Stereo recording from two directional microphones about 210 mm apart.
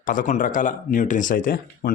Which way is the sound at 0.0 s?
40° left (ahead or behind).